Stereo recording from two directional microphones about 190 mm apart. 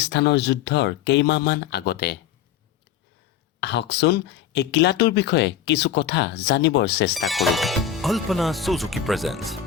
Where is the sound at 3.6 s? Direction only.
65° left (ahead or behind).